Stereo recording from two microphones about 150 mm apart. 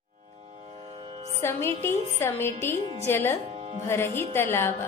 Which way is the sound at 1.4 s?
15° left (ahead or behind).